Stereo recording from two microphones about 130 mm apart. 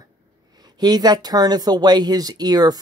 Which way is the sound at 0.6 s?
30° right (ahead or behind).